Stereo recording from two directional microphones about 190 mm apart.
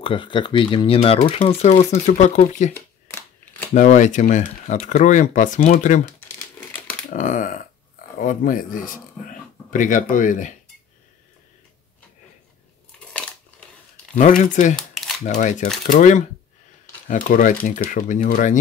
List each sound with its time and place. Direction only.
0.0 s speech: 25° left (ahead or behind)
3.1 s scissors: 10° left (ahead or behind)
3.7 s speech: 40° left (ahead or behind)
6.1 s crumpling: 10° left (ahead or behind)
7.1 s a sound: 40° left (ahead or behind)
8.2 s speech: 45° left (ahead or behind)
13.0 s crushing: 5° left (ahead or behind)
14.4 s speech: 40° left (ahead or behind)
14.8 s crumpling: centre (ahead or behind)
15.2 s speech: 40° left (ahead or behind)